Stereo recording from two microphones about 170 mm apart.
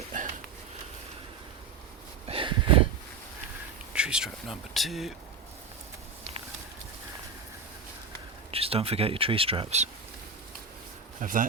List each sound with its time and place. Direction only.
0.1 s sniff: 50° right (ahead or behind)
2.2 s a sound: 30° right (ahead or behind)
3.9 s speech: 5° right (ahead or behind)
8.4 s speech: 35° right (ahead or behind)
11.2 s speech: 50° right (ahead or behind)